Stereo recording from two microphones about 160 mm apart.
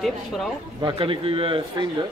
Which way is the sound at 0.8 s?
30° right (ahead or behind).